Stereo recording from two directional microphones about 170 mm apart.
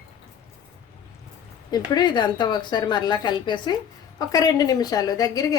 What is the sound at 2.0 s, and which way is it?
A woman's voice, 25° left (ahead or behind).